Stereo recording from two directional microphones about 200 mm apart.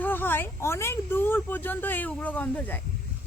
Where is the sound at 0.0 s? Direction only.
10° left (ahead or behind).